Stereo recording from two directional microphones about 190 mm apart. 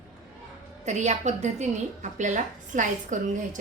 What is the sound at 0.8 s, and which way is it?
A woman's voice, 40° right (ahead or behind).